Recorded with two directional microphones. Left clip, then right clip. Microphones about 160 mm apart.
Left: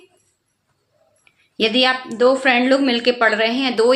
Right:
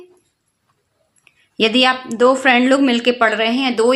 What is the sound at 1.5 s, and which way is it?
A woman's voice, 35° right (ahead or behind).